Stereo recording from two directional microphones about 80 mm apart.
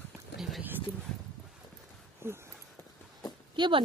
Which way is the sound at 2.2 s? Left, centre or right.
Right.